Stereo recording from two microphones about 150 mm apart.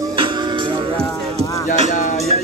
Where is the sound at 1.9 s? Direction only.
60° left (ahead or behind).